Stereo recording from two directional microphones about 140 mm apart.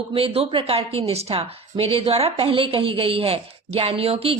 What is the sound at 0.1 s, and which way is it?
A woman's voice, 40° right (ahead or behind).